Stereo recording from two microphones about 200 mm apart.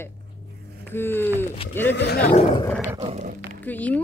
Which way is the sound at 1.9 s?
55° left (ahead or behind).